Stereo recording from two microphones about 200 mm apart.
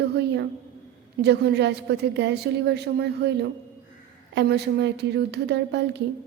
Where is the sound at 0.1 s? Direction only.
55° right (ahead or behind).